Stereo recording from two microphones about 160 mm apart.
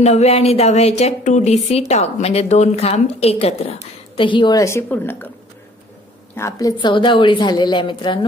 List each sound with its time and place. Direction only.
0.0 s a woman's voice: 40° left (ahead or behind); by 5.3 s 10° left (ahead or behind)
6.3 s a woman's voice: 15° left (ahead or behind)
6.8 s a woman's voice: 30° left (ahead or behind)